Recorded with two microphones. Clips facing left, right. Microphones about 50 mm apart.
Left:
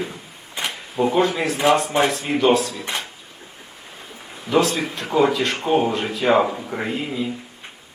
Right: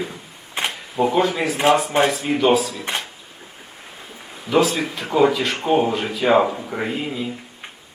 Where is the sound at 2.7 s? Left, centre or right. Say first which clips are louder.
Right 1 dB; right.